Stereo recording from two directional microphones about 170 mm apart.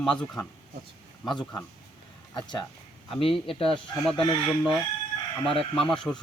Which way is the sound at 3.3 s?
Centre (ahead or behind).